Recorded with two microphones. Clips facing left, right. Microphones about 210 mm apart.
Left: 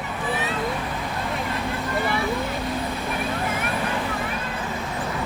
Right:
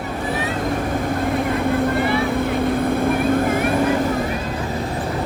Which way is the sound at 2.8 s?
55° right (ahead or behind).